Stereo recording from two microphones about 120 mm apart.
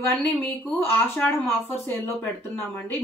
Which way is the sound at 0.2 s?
15° left (ahead or behind).